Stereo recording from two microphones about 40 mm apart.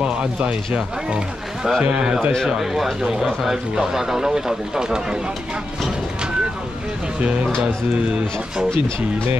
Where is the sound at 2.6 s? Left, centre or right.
Centre.